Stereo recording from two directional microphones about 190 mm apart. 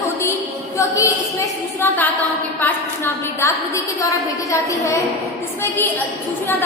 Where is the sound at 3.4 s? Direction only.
15° left (ahead or behind).